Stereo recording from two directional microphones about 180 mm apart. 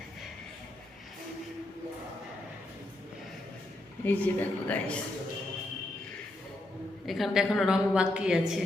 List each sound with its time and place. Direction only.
4.0 s speech: 10° left (ahead or behind)
7.0 s a woman's voice: centre (ahead or behind)